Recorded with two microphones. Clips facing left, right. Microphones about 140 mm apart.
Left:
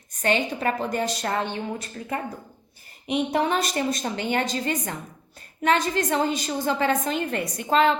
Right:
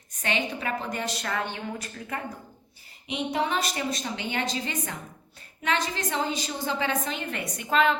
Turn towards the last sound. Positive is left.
turn(degrees=30)  # may be behind; listen again after turning